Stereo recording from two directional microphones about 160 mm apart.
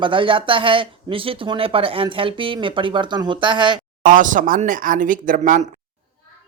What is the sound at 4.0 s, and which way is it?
Speech, 55° right (ahead or behind).